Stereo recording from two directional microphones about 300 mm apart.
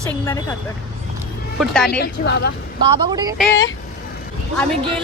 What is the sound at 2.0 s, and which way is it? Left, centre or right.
Speech, left.